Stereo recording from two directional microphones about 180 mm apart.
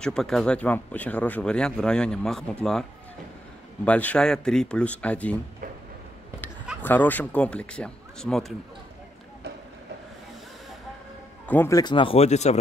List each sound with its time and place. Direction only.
0.0 s speech: 5° left (ahead or behind)
3.8 s speech: 10° left (ahead or behind)
6.8 s speech: 10° left (ahead or behind)
11.4 s speech: 10° left (ahead or behind)
11.8 s speech: 25° left (ahead or behind)